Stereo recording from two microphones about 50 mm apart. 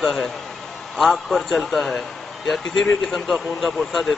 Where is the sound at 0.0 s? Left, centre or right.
Centre.